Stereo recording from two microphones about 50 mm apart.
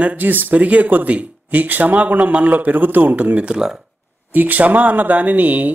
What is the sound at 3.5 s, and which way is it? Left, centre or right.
Speech, centre.